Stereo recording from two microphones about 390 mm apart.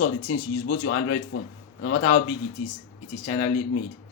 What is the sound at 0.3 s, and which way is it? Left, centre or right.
Speech, left.